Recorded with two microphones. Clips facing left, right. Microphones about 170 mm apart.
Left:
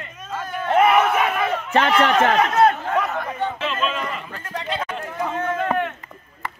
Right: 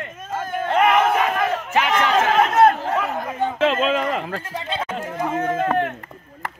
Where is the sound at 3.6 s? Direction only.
90° right.